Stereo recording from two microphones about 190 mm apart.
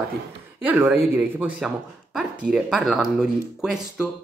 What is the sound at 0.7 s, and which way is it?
Speech, 10° right (ahead or behind).